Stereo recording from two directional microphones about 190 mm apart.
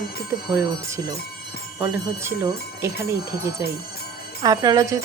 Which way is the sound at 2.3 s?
15° right (ahead or behind).